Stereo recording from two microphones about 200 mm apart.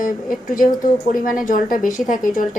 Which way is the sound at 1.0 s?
45° left (ahead or behind).